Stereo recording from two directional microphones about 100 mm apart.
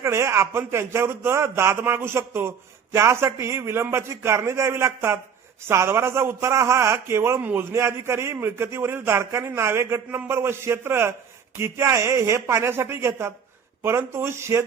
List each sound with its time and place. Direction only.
0.0 s a man's voice: 30° right (ahead or behind)